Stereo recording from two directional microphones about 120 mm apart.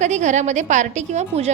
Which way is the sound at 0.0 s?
80° right.